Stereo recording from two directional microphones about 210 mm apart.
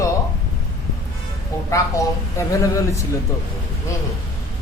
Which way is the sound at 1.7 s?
15° left (ahead or behind).